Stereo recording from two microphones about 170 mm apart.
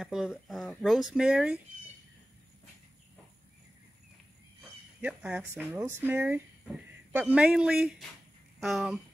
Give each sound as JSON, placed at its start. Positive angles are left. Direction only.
{"t": 0.0, "sound": "speech", "side_deg": 0}
{"t": 5.0, "sound": "speech", "side_deg": -5}
{"t": 5.4, "sound": "speech", "side_deg": -15}